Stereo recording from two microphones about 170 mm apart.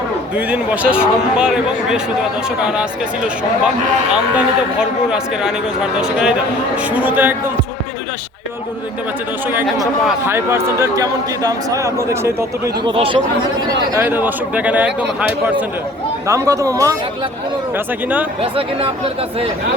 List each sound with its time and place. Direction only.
0.3 s a man's voice: 10° right (ahead or behind)
4.1 s a man's voice: 5° right (ahead or behind)
10.2 s speech: 15° right (ahead or behind)
12.8 s speech: 30° right (ahead or behind)
13.9 s speech: 10° right (ahead or behind)
16.2 s speech: 20° right (ahead or behind)